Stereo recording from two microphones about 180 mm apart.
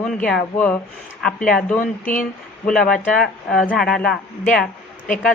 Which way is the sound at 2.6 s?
5° left (ahead or behind).